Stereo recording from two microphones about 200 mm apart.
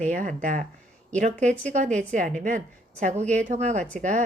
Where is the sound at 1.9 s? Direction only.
40° right (ahead or behind).